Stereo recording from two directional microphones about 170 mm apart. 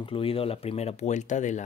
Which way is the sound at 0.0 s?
30° left (ahead or behind).